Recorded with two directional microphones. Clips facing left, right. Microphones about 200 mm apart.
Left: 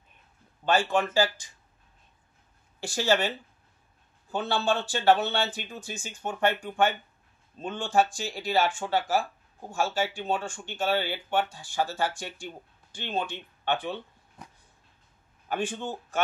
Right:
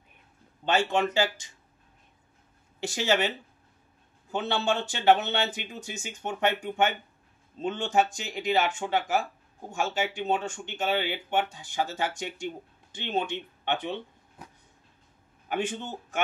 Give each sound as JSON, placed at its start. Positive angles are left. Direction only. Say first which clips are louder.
{"t": 0.7, "sound": "speech", "louder": "even", "side_deg": -25}
{"t": 2.8, "sound": "speech", "louder": "left 1 dB", "side_deg": -20}
{"t": 15.4, "sound": "a man's voice", "louder": "even", "side_deg": -20}